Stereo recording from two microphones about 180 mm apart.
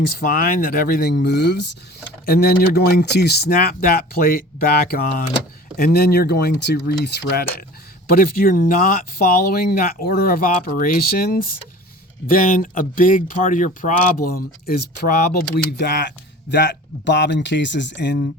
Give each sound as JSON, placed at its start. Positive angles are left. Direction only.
{"t": 0.2, "sound": "speech", "side_deg": 55}
{"t": 2.2, "sound": "speech", "side_deg": 60}
{"t": 8.1, "sound": "speech", "side_deg": 55}